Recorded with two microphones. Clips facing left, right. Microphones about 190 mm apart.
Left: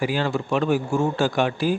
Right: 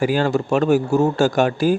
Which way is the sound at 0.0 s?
45° right (ahead or behind).